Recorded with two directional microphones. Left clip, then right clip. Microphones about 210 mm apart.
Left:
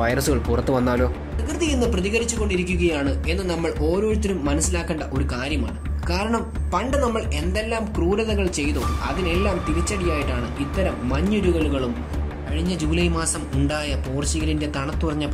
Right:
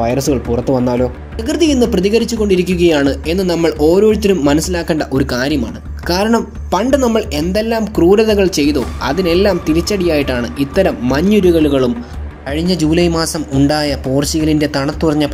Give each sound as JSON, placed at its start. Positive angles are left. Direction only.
{"t": 0.0, "sound": "speech", "side_deg": -5}
{"t": 1.4, "sound": "speech", "side_deg": -25}